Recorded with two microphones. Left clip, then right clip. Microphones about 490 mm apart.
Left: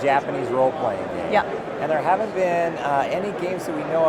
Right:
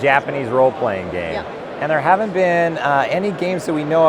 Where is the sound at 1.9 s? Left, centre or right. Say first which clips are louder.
Right 6 dB; right.